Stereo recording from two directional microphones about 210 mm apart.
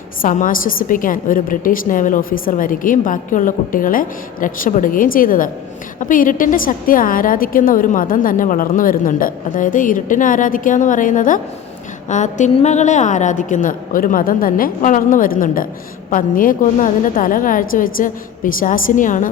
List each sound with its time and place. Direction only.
0.2 s a woman's voice: 40° left (ahead or behind)